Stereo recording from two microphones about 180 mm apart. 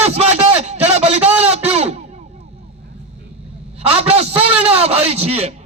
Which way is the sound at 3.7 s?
35° right (ahead or behind).